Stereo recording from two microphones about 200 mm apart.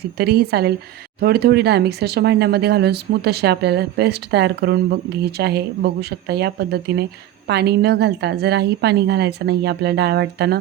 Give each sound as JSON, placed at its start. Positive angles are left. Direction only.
{"t": 0.2, "sound": "a woman's voice", "side_deg": -50}